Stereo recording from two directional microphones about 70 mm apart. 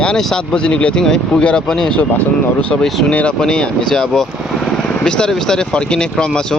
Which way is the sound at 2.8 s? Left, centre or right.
Centre.